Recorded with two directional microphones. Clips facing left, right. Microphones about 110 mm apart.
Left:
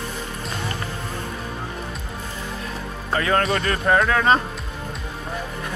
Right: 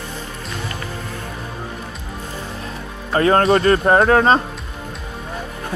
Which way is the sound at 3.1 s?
35° right (ahead or behind).